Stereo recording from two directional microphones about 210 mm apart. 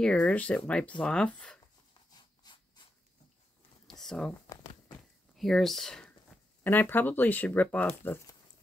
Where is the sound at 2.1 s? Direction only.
20° left (ahead or behind).